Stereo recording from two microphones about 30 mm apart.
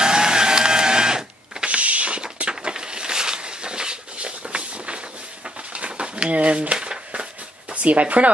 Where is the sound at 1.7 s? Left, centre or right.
Right.